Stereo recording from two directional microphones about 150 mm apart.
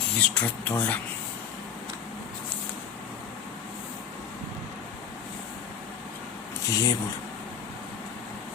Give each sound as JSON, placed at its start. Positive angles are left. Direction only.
{"t": 0.2, "sound": "speech", "side_deg": 10}
{"t": 6.7, "sound": "speech", "side_deg": 20}